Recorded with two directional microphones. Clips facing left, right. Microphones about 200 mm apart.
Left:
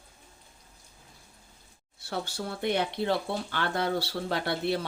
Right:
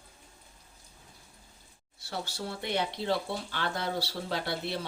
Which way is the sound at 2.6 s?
55° left (ahead or behind).